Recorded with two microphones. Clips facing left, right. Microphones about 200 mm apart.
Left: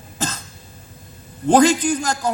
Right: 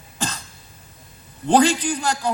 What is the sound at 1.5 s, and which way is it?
Speech, 40° left (ahead or behind).